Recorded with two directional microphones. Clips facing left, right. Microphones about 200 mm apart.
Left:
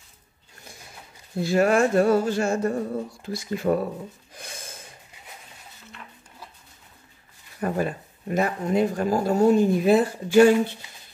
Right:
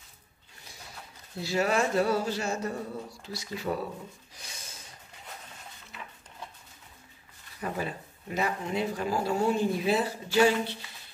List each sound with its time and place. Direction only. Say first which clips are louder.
1.4 s speech: left 7 dB; 50° left (ahead or behind)
4.3 s gasp: left 7 dB; 55° left (ahead or behind)
5.9 s a sound: right 1 dB; 5° right (ahead or behind)
7.6 s speech: left 8 dB; 50° left (ahead or behind)